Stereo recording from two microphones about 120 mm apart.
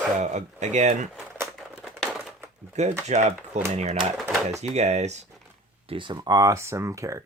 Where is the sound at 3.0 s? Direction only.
70° right (ahead or behind).